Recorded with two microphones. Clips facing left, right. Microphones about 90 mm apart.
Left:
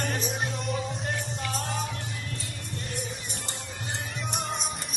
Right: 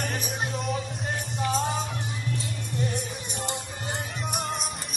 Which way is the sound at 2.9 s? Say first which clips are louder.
Right 3 dB; 20° right (ahead or behind).